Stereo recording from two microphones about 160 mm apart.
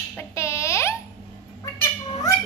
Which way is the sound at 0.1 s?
15° left (ahead or behind).